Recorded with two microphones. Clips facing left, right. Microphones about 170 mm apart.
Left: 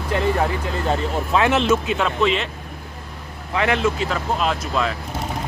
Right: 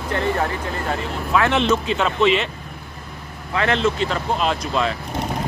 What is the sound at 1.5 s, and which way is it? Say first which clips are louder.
Speech: left 1 dB; 5° left (ahead or behind).